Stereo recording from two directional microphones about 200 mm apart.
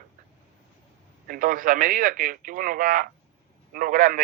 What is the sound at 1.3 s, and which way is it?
A man's voice, 45° right (ahead or behind).